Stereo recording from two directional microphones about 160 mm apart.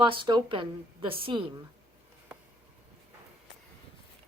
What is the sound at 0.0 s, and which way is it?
A woman's voice, 30° right (ahead or behind).